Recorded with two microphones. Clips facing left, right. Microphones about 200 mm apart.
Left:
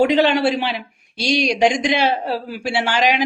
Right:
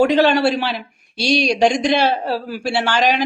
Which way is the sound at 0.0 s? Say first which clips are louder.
Right 1 dB; 15° left (ahead or behind).